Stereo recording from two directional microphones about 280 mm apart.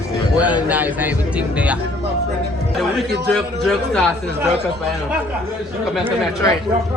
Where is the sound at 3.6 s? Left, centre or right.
Centre.